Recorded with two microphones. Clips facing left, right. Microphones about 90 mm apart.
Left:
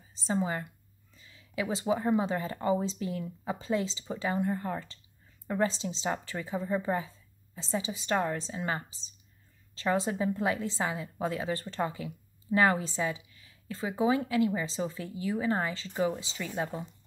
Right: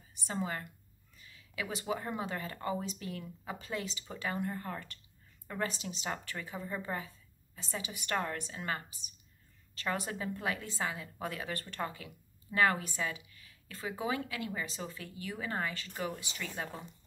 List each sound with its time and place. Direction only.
0.1 s a woman's voice: 20° left (ahead or behind)